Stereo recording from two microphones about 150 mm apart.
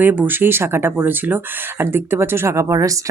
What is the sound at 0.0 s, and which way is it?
A woman's voice, 10° right (ahead or behind).